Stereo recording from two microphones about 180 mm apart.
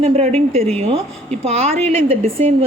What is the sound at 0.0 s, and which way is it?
A woman's voice, 40° right (ahead or behind).